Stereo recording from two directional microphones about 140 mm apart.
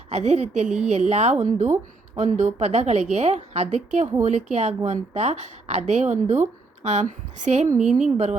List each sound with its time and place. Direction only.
0.1 s a woman's voice: 55° right (ahead or behind)